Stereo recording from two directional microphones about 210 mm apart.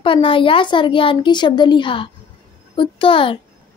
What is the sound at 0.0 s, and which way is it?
Speech, 25° left (ahead or behind).